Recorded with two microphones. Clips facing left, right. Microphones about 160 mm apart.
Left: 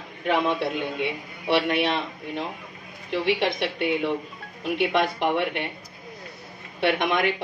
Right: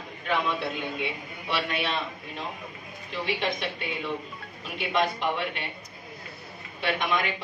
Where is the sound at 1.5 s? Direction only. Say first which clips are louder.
Left 7 dB; 60° left (ahead or behind).